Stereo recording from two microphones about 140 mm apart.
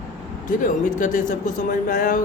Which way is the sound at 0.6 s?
65° left (ahead or behind).